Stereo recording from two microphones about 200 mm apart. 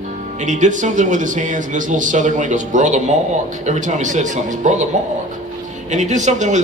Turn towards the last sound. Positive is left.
turn(degrees=-35)  # may be behind; listen again after turning